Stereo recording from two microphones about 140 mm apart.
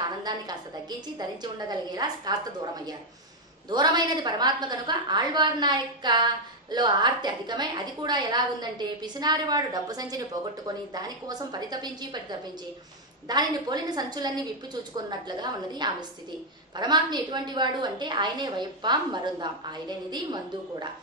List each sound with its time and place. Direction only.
0.2 s a woman's voice: 30° right (ahead or behind)